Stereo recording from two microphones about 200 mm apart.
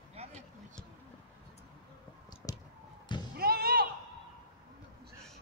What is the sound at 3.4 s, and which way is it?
Slam, 50° right (ahead or behind).